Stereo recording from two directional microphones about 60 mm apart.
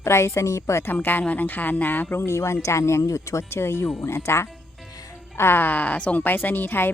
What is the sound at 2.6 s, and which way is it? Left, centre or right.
Speech, left.